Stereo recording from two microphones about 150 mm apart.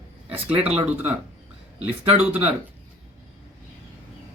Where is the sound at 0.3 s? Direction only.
10° right (ahead or behind).